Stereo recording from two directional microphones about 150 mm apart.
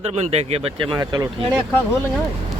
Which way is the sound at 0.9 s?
25° right (ahead or behind).